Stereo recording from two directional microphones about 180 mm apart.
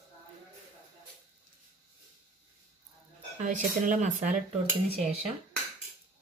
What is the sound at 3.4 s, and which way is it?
Speech, 45° right (ahead or behind).